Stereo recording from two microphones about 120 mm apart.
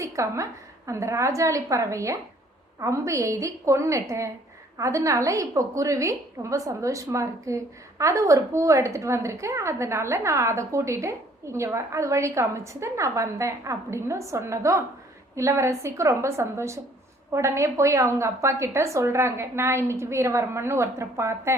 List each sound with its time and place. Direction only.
0.0 s a woman's voice: 25° right (ahead or behind)